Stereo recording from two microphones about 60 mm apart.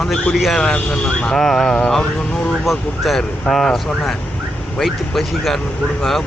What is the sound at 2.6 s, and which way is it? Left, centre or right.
Speech, centre.